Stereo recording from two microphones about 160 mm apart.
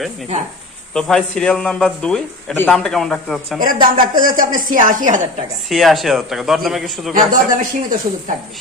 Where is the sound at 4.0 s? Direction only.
60° right (ahead or behind).